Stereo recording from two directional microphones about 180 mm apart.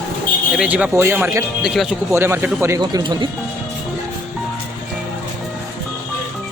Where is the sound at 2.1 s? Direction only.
15° right (ahead or behind).